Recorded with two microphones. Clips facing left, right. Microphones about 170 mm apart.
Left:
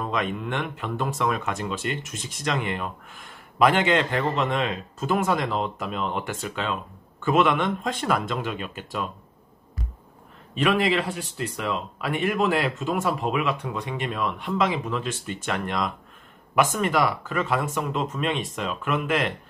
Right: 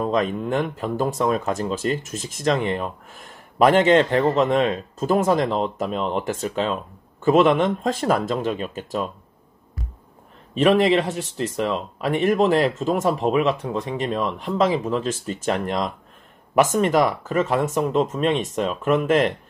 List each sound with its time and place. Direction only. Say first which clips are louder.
0.0 s speech: right 6 dB; 40° right (ahead or behind)
11.1 s speech: right 4 dB; 35° right (ahead or behind)